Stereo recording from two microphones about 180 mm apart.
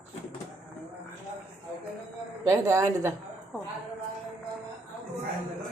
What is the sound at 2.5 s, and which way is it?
Speech, 15° right (ahead or behind).